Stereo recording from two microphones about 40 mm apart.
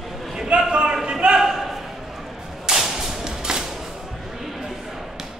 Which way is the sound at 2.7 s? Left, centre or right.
Centre.